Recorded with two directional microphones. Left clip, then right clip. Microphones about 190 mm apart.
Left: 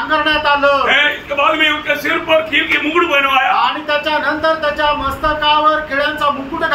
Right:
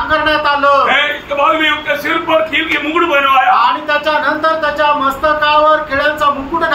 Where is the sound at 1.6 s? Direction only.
10° left (ahead or behind).